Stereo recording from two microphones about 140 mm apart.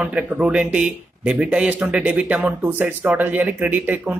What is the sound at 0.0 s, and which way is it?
Speech, 10° right (ahead or behind).